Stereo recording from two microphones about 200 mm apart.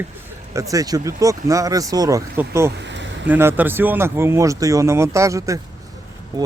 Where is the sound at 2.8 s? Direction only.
60° right (ahead or behind).